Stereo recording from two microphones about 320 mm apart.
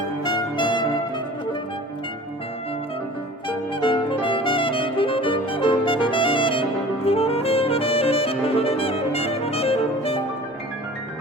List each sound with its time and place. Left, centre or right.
0.3 s music: centre
3.8 s music: centre